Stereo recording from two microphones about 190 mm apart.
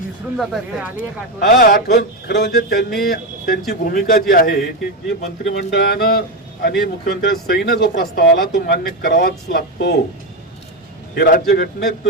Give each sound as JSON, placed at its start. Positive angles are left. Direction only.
{"t": 0.3, "sound": "speech", "side_deg": 0}
{"t": 0.9, "sound": "speech", "side_deg": 55}
{"t": 2.6, "sound": "a man's voice", "side_deg": 50}
{"t": 5.0, "sound": "speech", "side_deg": 65}
{"t": 11.1, "sound": "a man's voice", "side_deg": 55}